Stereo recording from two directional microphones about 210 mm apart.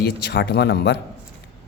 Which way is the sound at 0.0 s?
50° left (ahead or behind).